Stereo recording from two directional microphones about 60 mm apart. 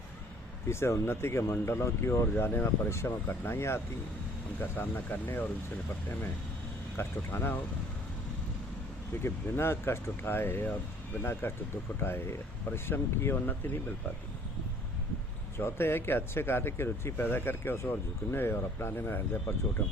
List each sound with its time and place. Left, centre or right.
0.7 s speech: left
6.9 s speech: left
9.2 s speech: left
15.5 s speech: left